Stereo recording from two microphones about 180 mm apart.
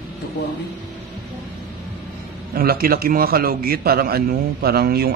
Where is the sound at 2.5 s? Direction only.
55° right (ahead or behind).